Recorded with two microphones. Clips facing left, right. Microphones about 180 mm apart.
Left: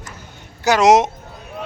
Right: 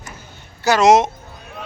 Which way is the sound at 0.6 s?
15° left (ahead or behind).